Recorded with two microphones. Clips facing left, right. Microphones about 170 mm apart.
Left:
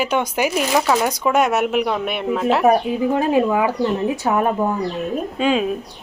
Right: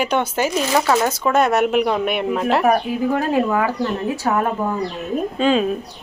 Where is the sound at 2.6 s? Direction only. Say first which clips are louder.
Left 2 dB; 20° left (ahead or behind).